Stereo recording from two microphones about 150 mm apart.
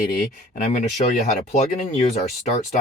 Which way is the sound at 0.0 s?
60° left (ahead or behind).